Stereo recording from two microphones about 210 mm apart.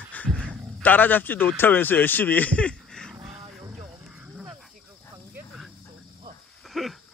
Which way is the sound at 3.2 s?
20° right (ahead or behind).